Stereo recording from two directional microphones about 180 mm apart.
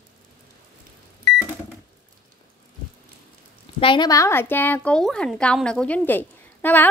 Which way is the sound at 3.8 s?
25° left (ahead or behind).